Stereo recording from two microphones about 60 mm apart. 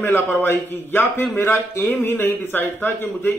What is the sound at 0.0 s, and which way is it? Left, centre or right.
Speech, left.